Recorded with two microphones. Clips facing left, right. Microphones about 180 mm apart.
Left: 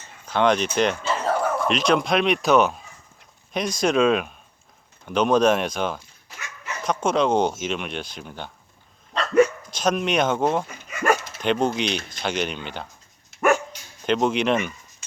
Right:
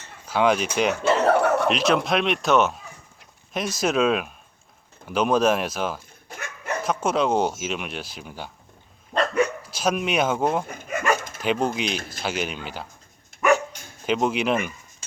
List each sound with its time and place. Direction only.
0.3 s speech: 5° right (ahead or behind)
1.0 s chuckle: 65° right (ahead or behind)
1.7 s speech: 5° right (ahead or behind)
6.2 s dog: 55° right (ahead or behind)
6.8 s speech: 5° right (ahead or behind)
9.1 s dog: 55° right (ahead or behind)
9.6 s speech: 5° right (ahead or behind)
10.7 s dog: 55° right (ahead or behind)
11.6 s speech: 5° right (ahead or behind)
13.3 s dog: 50° right (ahead or behind)
14.0 s speech: 5° right (ahead or behind)